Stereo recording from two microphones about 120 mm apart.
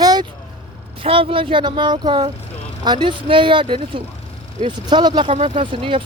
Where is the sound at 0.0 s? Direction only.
30° right (ahead or behind).